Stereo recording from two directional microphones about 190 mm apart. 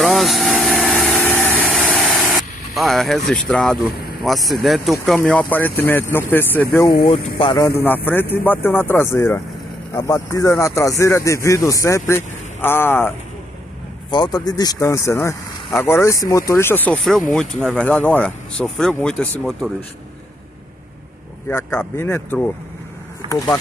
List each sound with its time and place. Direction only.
0.0 s vehicle: centre (ahead or behind)
4.2 s speech: centre (ahead or behind)
7.1 s speech: 25° left (ahead or behind)
7.6 s speech: 10° left (ahead or behind)
14.1 s speech: 20° left (ahead or behind); by 19.2 s 5° left (ahead or behind)
21.5 s speech: 10° left (ahead or behind)